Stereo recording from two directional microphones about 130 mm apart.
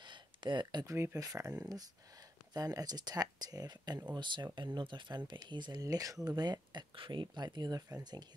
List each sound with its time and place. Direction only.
0.0 s a sound: 35° right (ahead or behind)
0.9 s speech: 20° right (ahead or behind)
2.5 s speech: 30° right (ahead or behind)